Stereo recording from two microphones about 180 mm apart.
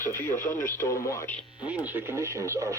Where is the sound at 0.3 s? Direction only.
45° left (ahead or behind).